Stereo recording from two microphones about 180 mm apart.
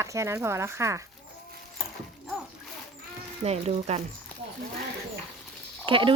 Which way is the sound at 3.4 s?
35° right (ahead or behind).